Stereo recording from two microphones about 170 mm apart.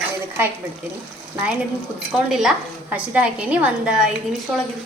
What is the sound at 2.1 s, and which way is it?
A woman's voice, 5° right (ahead or behind).